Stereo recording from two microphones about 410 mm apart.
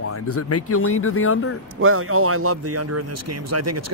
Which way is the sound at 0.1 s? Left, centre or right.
Left.